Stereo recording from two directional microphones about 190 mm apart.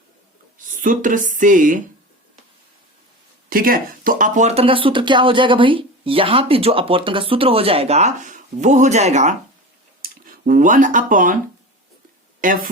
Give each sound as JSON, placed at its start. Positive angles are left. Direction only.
{"t": 0.6, "sound": "speech", "side_deg": -45}
{"t": 3.5, "sound": "speech", "side_deg": -50}
{"t": 12.4, "sound": "speech", "side_deg": -45}